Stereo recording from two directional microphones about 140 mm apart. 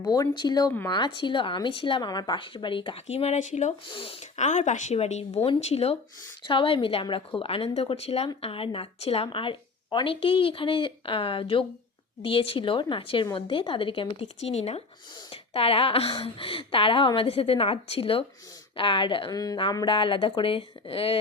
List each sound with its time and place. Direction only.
0.0 s a woman's voice: 30° left (ahead or behind); by 3.8 s 55° left (ahead or behind)
3.8 s a woman's voice: 40° left (ahead or behind)